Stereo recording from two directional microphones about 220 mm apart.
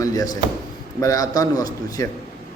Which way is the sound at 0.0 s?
15° left (ahead or behind).